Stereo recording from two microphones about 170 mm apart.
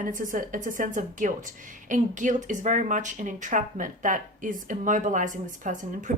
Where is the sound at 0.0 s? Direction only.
50° right (ahead or behind).